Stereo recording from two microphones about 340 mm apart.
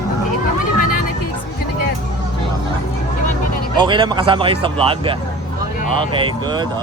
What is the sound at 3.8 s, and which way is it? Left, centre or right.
Speech, centre.